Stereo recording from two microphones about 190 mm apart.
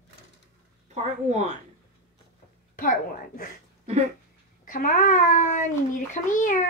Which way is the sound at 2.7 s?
45° left (ahead or behind).